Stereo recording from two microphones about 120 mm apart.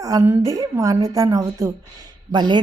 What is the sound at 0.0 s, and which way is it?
A woman's voice, 25° right (ahead or behind).